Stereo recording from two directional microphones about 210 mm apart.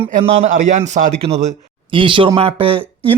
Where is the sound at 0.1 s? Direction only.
35° right (ahead or behind).